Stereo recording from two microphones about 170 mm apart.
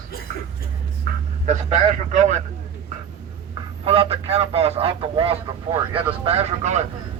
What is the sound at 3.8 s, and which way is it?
Speech, 35° right (ahead or behind).